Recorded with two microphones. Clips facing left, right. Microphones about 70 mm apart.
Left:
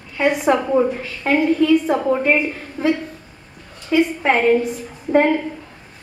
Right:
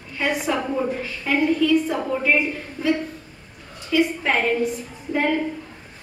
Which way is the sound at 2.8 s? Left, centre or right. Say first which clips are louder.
Left 3 dB; left.